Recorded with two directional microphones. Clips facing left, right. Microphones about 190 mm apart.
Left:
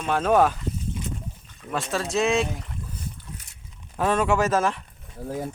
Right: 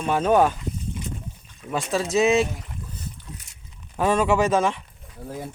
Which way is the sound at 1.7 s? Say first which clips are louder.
Right 3 dB; centre (ahead or behind).